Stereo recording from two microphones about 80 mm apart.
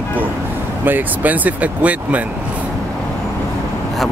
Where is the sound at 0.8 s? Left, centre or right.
Right.